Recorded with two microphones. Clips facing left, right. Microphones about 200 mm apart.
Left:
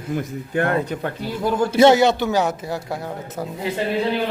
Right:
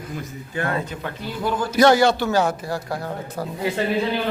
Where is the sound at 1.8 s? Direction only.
20° left (ahead or behind).